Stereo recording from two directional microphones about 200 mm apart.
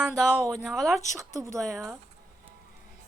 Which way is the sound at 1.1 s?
15° right (ahead or behind).